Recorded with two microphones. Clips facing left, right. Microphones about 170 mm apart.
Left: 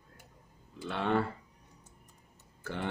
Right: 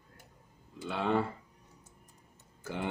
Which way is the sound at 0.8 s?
5° right (ahead or behind).